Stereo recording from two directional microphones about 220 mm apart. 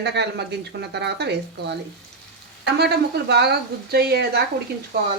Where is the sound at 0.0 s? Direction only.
50° right (ahead or behind).